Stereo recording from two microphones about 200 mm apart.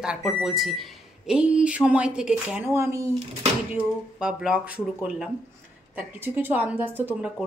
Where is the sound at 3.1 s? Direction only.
30° right (ahead or behind).